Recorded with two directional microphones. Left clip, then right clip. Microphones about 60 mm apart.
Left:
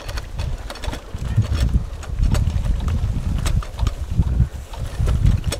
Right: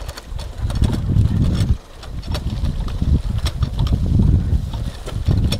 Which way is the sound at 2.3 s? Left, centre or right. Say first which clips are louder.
Even; centre.